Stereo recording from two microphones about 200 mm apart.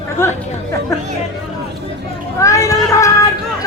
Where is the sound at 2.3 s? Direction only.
15° left (ahead or behind).